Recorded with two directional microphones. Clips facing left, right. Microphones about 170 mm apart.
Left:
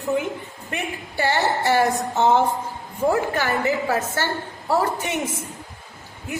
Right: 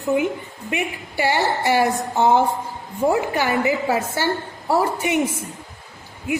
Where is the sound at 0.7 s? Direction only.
15° right (ahead or behind).